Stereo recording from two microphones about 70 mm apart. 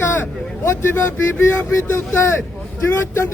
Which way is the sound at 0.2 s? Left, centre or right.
Left.